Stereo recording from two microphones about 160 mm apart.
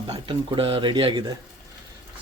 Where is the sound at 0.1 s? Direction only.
35° right (ahead or behind).